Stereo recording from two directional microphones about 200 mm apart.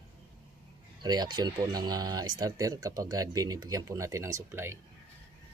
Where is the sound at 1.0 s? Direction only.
20° right (ahead or behind).